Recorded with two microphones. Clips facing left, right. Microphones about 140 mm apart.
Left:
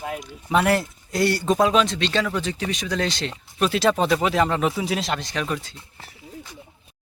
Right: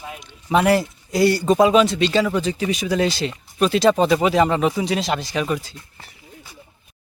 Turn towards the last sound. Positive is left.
turn(degrees=0)  # may be behind; listen again after turning